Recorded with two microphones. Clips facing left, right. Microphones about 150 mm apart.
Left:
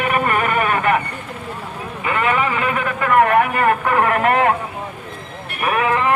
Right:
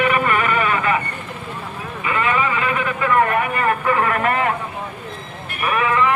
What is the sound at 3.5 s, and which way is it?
Vehicle, 55° left (ahead or behind).